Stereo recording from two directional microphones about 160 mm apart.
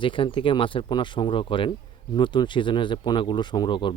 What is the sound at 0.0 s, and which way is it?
Speech, 30° left (ahead or behind).